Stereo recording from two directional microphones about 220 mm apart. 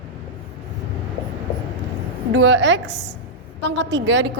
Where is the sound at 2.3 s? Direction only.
55° right (ahead or behind).